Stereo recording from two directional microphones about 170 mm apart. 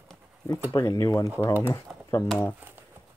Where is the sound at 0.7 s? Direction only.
15° left (ahead or behind).